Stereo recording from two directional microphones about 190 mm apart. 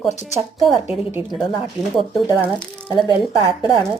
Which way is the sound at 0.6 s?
Centre (ahead or behind).